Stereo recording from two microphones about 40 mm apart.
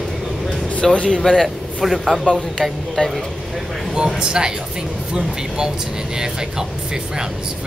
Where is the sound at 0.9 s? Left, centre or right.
Left.